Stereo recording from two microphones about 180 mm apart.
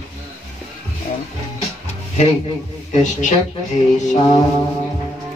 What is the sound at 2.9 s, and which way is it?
Speech, 40° left (ahead or behind).